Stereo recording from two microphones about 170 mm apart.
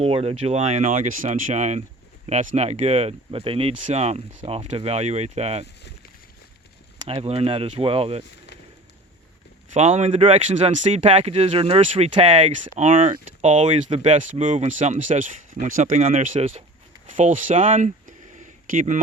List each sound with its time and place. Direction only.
0.0 s speech: 35° right (ahead or behind)
7.0 s speech: 35° right (ahead or behind)
9.7 s speech: 40° right (ahead or behind)
12.7 s speech: 50° right (ahead or behind)
13.0 s speech: 40° right (ahead or behind)
13.7 s speech: 30° right (ahead or behind); by 18.9 s 50° right (ahead or behind)